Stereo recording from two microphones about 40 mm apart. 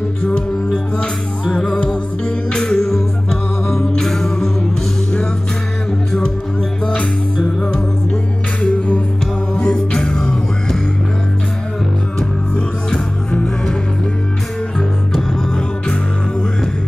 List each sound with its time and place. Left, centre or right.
0.9 s music: left
2.6 s music: centre
6.9 s music: left
8.6 s music: left
9.8 s music: centre